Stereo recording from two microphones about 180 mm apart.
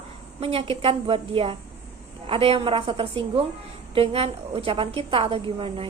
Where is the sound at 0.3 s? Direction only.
30° right (ahead or behind).